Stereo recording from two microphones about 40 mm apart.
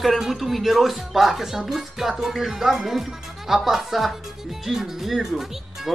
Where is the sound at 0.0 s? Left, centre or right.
Centre.